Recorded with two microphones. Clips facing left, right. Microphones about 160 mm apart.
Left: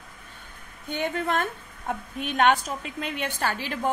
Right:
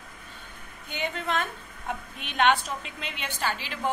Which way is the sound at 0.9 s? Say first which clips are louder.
Left 3 dB; 50° left (ahead or behind).